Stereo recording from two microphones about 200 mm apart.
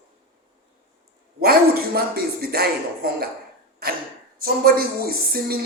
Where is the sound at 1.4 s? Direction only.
50° right (ahead or behind).